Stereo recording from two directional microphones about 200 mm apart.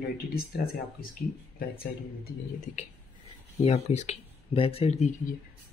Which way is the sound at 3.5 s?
35° left (ahead or behind).